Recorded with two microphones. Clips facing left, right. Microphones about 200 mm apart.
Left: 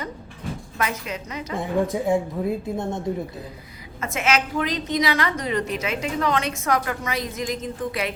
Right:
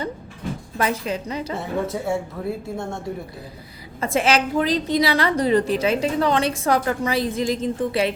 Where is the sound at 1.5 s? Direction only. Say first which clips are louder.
Left 5 dB; 15° left (ahead or behind).